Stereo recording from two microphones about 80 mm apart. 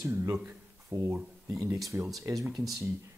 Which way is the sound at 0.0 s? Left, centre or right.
Right.